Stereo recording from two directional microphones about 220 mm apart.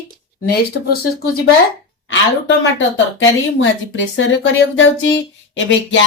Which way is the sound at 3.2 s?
60° left (ahead or behind).